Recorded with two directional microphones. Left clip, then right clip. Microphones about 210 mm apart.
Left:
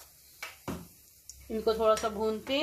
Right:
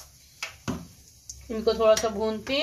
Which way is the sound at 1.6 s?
10° left (ahead or behind).